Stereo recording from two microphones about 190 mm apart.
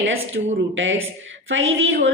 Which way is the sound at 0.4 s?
55° right (ahead or behind).